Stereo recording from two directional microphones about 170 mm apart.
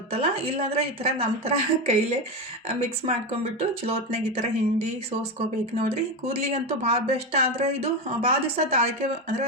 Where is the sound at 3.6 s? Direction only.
40° right (ahead or behind).